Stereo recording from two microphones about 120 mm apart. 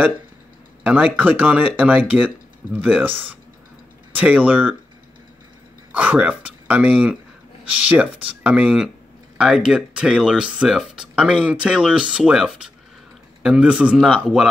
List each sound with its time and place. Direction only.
0.8 s speech: 15° right (ahead or behind)
4.1 s speech: 15° right (ahead or behind)
5.9 s speech: 15° right (ahead or behind)